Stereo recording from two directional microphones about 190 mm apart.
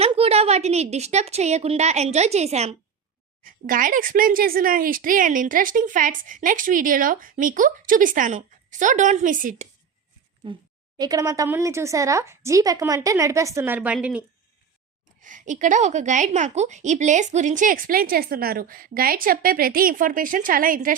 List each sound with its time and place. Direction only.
0.0 s a woman's voice: 30° right (ahead or behind)
3.4 s speech: 45° right (ahead or behind)
10.4 s a woman's voice: 25° right (ahead or behind); by 14.3 s 5° right (ahead or behind)
15.2 s speech: 40° right (ahead or behind)